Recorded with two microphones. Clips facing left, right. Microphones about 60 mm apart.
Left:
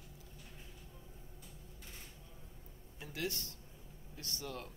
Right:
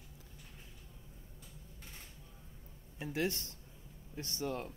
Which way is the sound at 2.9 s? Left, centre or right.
Right.